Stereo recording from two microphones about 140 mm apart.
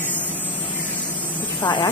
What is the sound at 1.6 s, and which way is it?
Speech, 35° left (ahead or behind).